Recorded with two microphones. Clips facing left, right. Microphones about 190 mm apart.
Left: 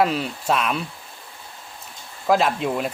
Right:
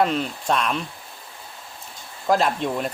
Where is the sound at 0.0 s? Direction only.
5° left (ahead or behind).